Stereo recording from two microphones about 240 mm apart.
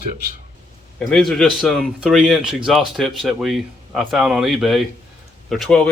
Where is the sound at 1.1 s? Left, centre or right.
Centre.